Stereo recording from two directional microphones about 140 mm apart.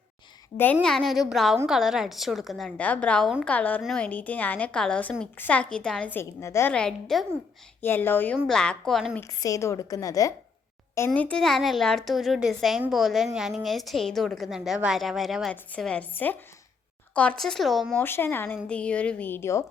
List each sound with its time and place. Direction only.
0.5 s a woman's voice: 15° left (ahead or behind)
0.8 s a woman's voice: 5° left (ahead or behind); by 6.7 s 20° left (ahead or behind)
6.7 s a woman's voice: 5° left (ahead or behind)
7.8 s a woman's voice: 15° left (ahead or behind)
9.1 s a woman's voice: 20° left (ahead or behind); by 18.0 s centre (ahead or behind)
18.0 s a woman's voice: 15° left (ahead or behind)